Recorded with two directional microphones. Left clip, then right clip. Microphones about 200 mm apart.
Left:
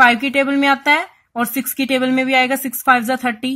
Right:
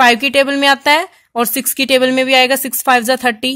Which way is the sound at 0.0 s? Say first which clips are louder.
Right 2 dB; 40° right (ahead or behind).